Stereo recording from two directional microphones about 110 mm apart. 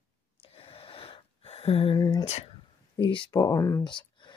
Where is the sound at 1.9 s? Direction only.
35° left (ahead or behind).